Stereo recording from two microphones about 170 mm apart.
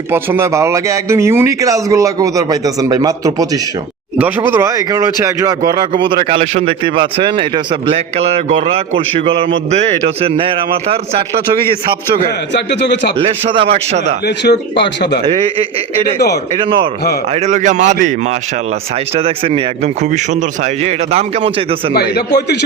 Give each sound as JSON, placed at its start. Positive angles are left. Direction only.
{"t": 0.1, "sound": "a man's voice", "side_deg": -15}
{"t": 12.5, "sound": "a man's voice", "side_deg": 90}
{"t": 13.1, "sound": "a man's voice", "side_deg": -30}
{"t": 14.3, "sound": "a man's voice", "side_deg": 75}
{"t": 17.4, "sound": "a man's voice", "side_deg": -45}
{"t": 19.1, "sound": "a man's voice", "side_deg": -35}